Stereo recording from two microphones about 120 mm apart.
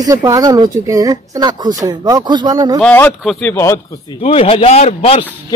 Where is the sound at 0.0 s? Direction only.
30° right (ahead or behind).